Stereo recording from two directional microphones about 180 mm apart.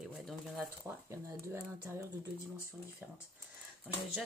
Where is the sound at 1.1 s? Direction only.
15° right (ahead or behind).